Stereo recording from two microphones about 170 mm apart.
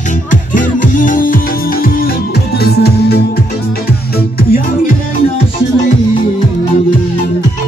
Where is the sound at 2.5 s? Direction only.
70° left (ahead or behind).